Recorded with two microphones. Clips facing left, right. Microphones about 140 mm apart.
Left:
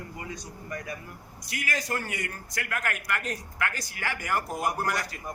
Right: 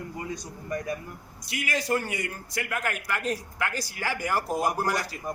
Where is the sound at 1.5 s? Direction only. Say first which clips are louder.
Right 4 dB; 25° right (ahead or behind).